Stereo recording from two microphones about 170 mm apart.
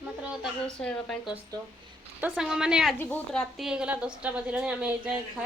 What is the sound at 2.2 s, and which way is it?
Speech, 5° right (ahead or behind).